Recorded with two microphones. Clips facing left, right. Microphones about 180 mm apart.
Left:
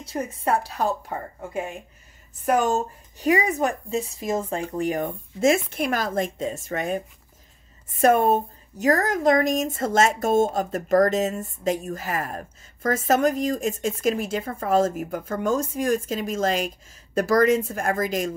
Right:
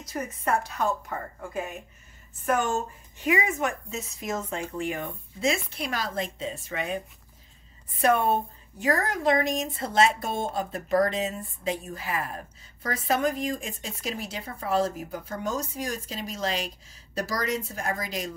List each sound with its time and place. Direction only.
0.0 s a woman's voice: 30° left (ahead or behind)
2.4 s a woman's voice: 40° left (ahead or behind)